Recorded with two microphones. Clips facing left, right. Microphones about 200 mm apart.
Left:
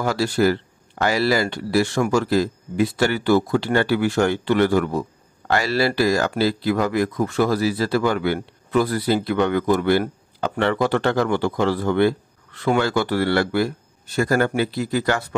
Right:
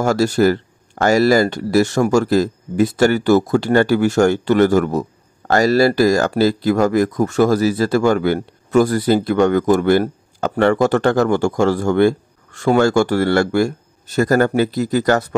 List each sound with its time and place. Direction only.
0.0 s speech: 45° right (ahead or behind)